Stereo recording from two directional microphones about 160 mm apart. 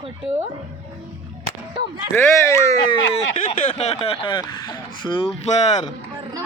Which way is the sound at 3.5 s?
40° left (ahead or behind).